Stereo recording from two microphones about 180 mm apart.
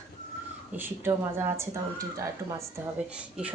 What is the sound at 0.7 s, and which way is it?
A woman's voice, 10° right (ahead or behind).